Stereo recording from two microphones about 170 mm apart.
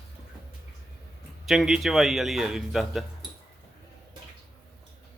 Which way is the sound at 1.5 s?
Centre (ahead or behind).